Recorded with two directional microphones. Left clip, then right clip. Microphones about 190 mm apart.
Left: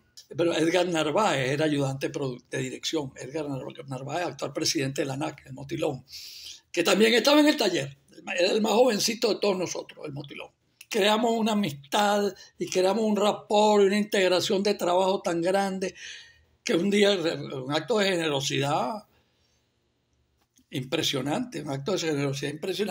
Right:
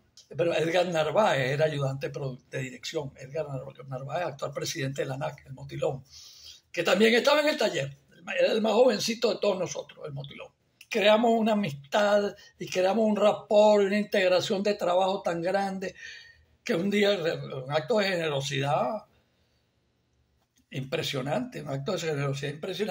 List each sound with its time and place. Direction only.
0.4 s speech: 35° left (ahead or behind)
20.7 s speech: 40° left (ahead or behind)